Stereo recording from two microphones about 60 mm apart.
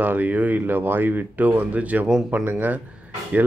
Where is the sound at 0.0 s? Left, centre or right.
Right.